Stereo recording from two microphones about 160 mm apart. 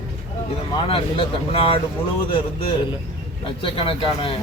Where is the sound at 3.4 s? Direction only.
35° left (ahead or behind).